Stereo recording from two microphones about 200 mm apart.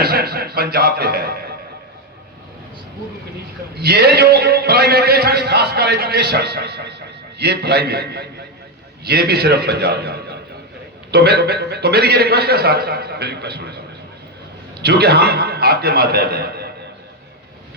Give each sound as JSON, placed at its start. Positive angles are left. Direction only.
{"t": 0.0, "sound": "a man's voice", "side_deg": -50}
{"t": 3.8, "sound": "a man's voice", "side_deg": -50}
{"t": 14.8, "sound": "a man's voice", "side_deg": -55}